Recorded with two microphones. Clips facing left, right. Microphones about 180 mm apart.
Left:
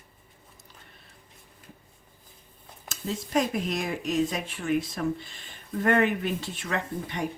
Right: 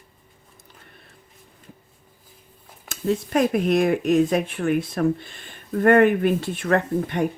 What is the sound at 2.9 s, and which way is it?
Speech, 60° right (ahead or behind).